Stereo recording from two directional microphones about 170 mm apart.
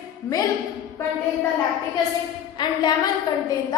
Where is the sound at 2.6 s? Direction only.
25° left (ahead or behind).